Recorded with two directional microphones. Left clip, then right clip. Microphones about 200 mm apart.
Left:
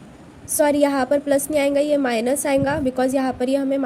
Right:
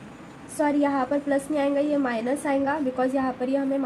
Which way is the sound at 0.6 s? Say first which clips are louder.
Left 6 dB; 55° left (ahead or behind).